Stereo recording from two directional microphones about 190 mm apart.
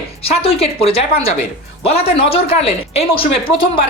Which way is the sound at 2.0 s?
30° left (ahead or behind).